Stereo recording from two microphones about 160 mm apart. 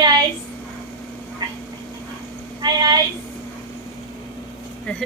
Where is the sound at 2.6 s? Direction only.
25° right (ahead or behind).